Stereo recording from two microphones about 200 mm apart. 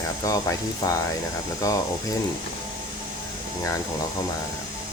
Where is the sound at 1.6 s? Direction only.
15° left (ahead or behind).